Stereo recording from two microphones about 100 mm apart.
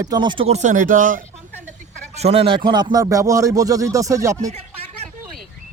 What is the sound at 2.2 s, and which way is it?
Speech, 80° right.